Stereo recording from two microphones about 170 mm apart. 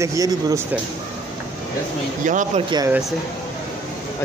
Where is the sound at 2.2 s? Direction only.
50° right (ahead or behind).